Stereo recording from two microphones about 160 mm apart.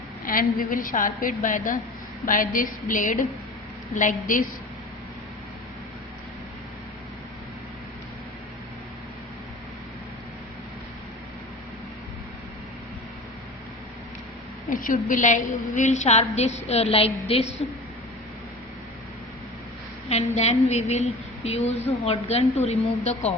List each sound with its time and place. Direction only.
0.3 s a woman's voice: 60° left (ahead or behind)
14.7 s a woman's voice: 55° left (ahead or behind); by 17.4 s 35° left (ahead or behind)
20.1 s a woman's voice: 40° left (ahead or behind)